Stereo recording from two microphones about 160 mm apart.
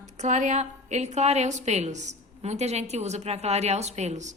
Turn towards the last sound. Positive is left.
turn(degrees=-45)  # may be behind; listen again after turning